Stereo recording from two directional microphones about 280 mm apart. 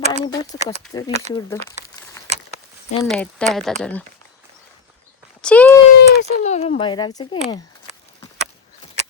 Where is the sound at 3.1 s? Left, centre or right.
Centre.